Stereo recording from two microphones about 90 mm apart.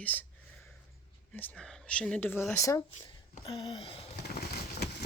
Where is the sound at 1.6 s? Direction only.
10° left (ahead or behind).